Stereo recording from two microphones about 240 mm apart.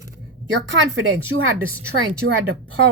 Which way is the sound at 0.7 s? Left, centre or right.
Right.